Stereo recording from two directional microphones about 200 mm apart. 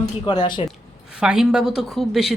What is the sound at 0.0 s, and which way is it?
Speech, 20° left (ahead or behind).